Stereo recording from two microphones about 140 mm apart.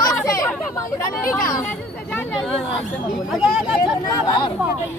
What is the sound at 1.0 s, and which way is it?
Speech, 20° left (ahead or behind).